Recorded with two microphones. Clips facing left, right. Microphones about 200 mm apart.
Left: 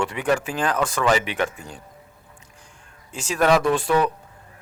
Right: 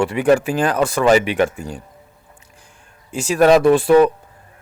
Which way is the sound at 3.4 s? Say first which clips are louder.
Right 6 dB; 40° right (ahead or behind).